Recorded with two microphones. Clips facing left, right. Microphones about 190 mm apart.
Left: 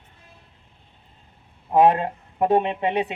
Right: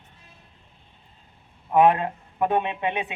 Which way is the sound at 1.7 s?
35° left (ahead or behind).